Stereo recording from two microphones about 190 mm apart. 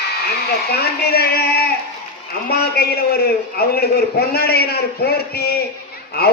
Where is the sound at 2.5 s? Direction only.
55° left (ahead or behind).